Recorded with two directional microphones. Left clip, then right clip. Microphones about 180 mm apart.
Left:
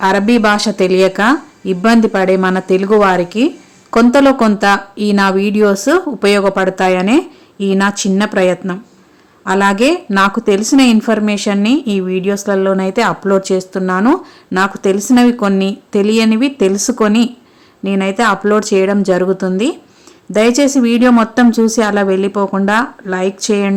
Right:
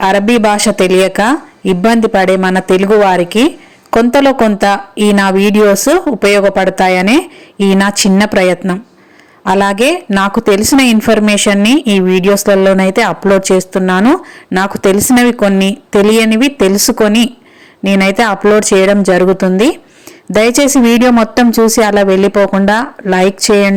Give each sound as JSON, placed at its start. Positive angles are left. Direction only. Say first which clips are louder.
{"t": 0.0, "sound": "a woman's voice", "louder": "right 2 dB", "side_deg": -15}